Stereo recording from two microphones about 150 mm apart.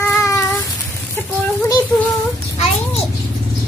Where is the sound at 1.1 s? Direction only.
15° left (ahead or behind).